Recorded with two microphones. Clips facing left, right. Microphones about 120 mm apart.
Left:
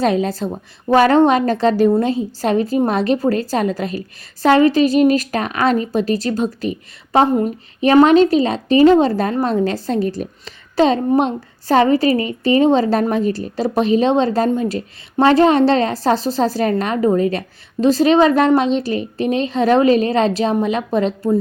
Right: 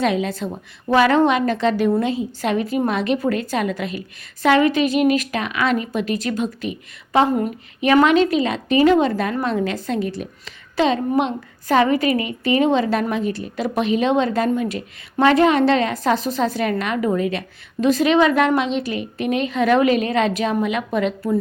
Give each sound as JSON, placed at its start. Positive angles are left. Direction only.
{"t": 0.0, "sound": "a woman's voice", "side_deg": 40}